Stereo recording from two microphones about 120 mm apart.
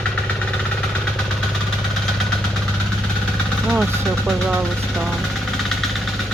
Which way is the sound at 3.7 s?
5° right (ahead or behind).